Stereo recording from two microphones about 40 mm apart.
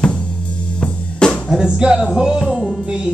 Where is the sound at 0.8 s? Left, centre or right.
Left.